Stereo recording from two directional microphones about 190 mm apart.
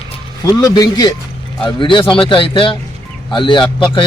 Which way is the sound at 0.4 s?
20° left (ahead or behind).